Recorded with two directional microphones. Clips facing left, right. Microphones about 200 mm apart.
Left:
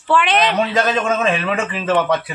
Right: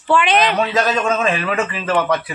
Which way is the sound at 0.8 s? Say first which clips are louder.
Even; 25° left (ahead or behind).